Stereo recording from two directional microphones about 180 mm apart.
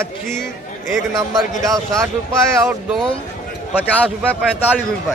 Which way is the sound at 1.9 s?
15° right (ahead or behind).